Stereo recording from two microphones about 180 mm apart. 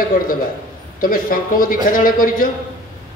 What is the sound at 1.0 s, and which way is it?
A man's voice, 50° left (ahead or behind).